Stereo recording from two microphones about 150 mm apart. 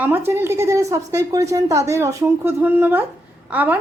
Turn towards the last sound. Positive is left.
turn(degrees=-10)  # may be behind; listen again after turning